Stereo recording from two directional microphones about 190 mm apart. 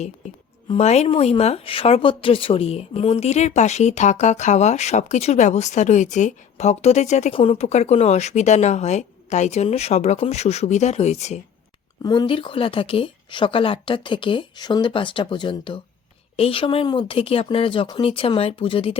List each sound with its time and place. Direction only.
0.7 s speech: 35° left (ahead or behind)
12.0 s speech: 25° left (ahead or behind)